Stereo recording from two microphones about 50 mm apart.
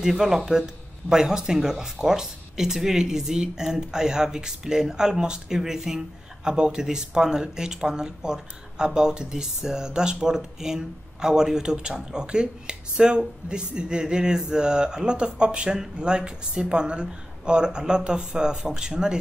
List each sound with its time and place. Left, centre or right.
0.0 s speech: centre